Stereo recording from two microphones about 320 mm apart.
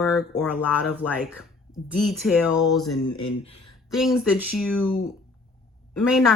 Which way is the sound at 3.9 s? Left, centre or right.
Centre.